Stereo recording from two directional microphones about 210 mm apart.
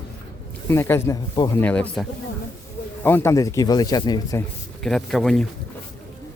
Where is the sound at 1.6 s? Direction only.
5° left (ahead or behind).